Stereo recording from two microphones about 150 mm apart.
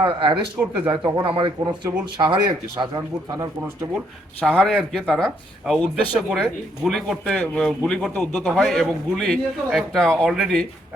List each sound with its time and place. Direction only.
0.2 s speech: 30° right (ahead or behind)
4.4 s a man's voice: 5° left (ahead or behind)